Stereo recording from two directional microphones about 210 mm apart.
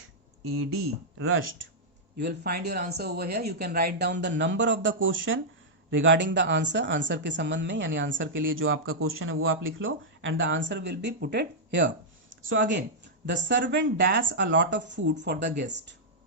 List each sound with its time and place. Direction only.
1.2 s speech: 75° right (ahead or behind)
2.1 s speech: 50° right (ahead or behind)
12.3 s a sound: 65° right (ahead or behind)
13.2 s speech: 60° right (ahead or behind)